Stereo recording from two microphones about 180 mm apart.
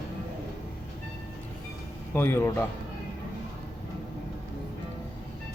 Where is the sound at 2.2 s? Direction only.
15° left (ahead or behind).